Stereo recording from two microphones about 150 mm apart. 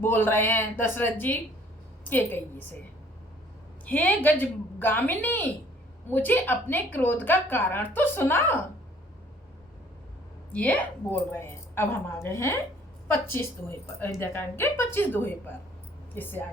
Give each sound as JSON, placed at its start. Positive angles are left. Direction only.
{"t": 0.0, "sound": "a woman's voice", "side_deg": 15}
{"t": 3.8, "sound": "a woman's voice", "side_deg": 10}
{"t": 10.5, "sound": "a woman's voice", "side_deg": 10}